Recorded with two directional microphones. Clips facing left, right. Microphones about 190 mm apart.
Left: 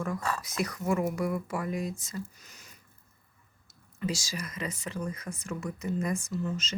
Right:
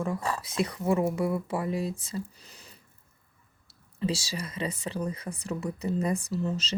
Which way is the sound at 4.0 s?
30° right (ahead or behind).